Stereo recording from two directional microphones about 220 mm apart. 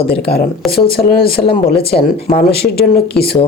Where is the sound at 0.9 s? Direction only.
45° left (ahead or behind).